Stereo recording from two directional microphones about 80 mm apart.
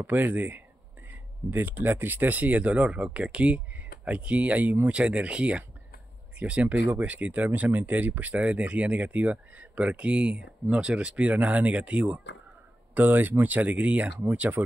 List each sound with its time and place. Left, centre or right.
0.0 s speech: right